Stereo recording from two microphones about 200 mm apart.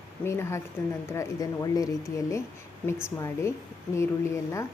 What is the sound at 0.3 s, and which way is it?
Speech, 15° left (ahead or behind).